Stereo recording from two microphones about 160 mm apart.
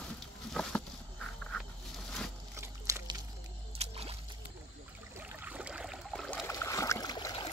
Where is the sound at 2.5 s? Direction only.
15° right (ahead or behind).